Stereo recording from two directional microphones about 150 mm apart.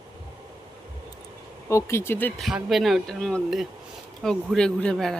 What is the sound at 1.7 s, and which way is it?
Speech, 20° left (ahead or behind).